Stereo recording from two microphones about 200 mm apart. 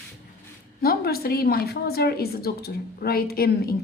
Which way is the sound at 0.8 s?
50° left (ahead or behind).